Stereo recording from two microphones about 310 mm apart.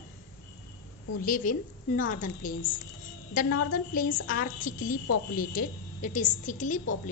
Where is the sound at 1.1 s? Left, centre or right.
Left.